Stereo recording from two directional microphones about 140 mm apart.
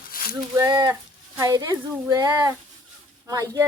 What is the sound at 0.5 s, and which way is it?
Speech, 25° right (ahead or behind).